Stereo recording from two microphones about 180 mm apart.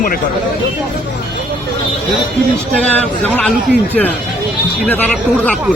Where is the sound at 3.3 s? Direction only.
10° left (ahead or behind).